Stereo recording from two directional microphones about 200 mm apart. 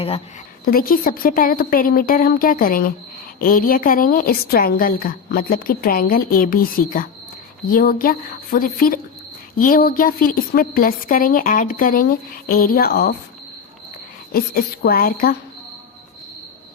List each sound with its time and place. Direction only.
0.6 s a woman's voice: 45° left (ahead or behind)
14.3 s a woman's voice: 50° left (ahead or behind)